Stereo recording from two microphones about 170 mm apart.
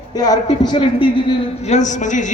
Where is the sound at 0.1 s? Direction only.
20° left (ahead or behind).